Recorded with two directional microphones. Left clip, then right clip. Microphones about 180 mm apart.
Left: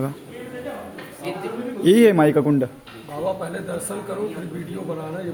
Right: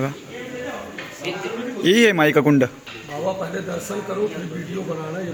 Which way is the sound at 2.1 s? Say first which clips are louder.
Right 1 dB; 15° right (ahead or behind).